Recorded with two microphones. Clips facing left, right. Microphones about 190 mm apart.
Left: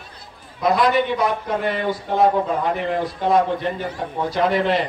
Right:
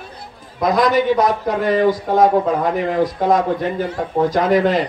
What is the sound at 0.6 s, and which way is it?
A man's voice, 40° right (ahead or behind).